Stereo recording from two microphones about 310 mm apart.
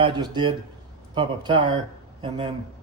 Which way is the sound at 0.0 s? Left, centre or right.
Centre.